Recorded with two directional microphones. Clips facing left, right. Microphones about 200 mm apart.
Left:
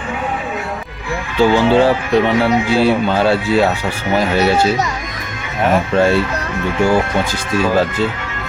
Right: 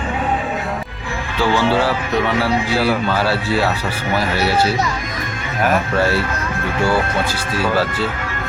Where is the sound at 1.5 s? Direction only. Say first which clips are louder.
Left 4 dB; 20° left (ahead or behind).